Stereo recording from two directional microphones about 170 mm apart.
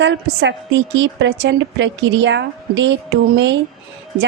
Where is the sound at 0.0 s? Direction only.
90° right.